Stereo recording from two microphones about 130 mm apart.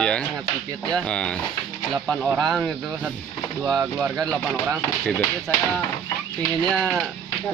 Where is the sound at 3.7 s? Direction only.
5° right (ahead or behind).